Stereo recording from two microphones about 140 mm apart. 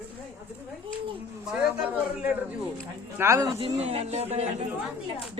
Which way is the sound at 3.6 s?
45° right (ahead or behind).